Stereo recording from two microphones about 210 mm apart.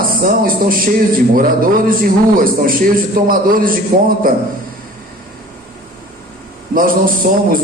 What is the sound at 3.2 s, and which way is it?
A man's voice, 40° right (ahead or behind).